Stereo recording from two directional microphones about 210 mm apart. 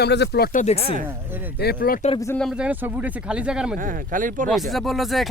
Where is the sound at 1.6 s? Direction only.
45° left (ahead or behind).